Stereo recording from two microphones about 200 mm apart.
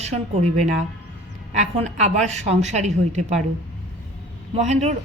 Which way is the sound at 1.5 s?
35° right (ahead or behind).